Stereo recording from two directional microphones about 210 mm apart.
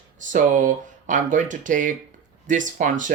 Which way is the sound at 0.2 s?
35° right (ahead or behind).